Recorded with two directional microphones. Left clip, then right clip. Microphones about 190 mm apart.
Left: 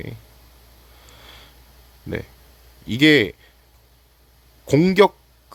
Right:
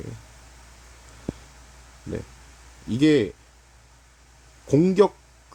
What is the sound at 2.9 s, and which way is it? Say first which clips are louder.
Speech: left 5 dB; 5° left (ahead or behind).